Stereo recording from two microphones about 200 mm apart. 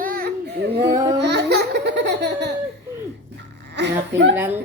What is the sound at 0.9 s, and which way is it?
Babbling, 15° right (ahead or behind).